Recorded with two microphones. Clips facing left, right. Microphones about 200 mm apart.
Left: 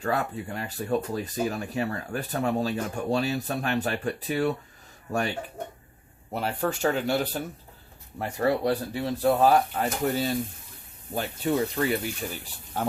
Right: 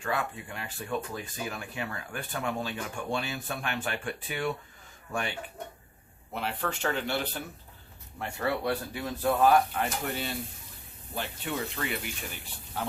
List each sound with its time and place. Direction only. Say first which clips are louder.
0.0 s speech: left 5 dB; 40° left (ahead or behind)
6.3 s speech: left 5 dB; 40° left (ahead or behind)